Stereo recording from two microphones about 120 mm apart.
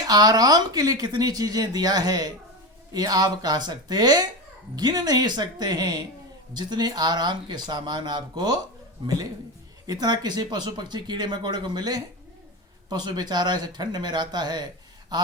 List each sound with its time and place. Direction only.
0.0 s speech: 35° right (ahead or behind)
9.0 s a man's voice: 45° right (ahead or behind)
9.8 s speech: 35° right (ahead or behind)